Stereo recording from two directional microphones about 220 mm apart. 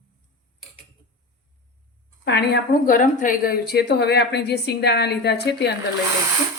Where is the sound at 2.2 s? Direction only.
50° left (ahead or behind).